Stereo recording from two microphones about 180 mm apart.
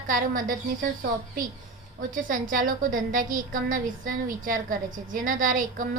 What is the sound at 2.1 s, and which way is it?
A woman's voice, 50° right (ahead or behind).